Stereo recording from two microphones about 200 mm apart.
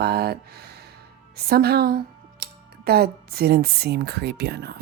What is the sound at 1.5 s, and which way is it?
Speech, 50° right (ahead or behind).